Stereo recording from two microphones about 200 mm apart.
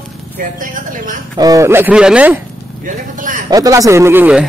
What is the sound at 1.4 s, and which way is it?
Speech, 15° right (ahead or behind).